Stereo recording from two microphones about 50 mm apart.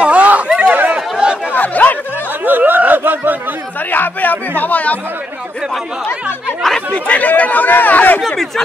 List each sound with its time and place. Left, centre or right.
0.0 s a sound: right
0.5 s a sound: centre
0.7 s chatter: right
1.1 s chatter: centre
1.5 s chatter: left
2.4 s a sound: right
3.9 s speech: left
6.9 s speech: left
8.3 s speech: centre